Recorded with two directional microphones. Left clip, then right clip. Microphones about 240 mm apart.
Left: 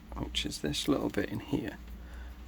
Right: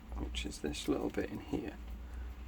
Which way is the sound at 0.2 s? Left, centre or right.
Left.